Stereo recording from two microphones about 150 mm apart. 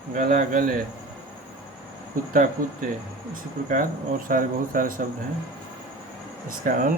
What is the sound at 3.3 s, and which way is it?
Speech, 65° right (ahead or behind).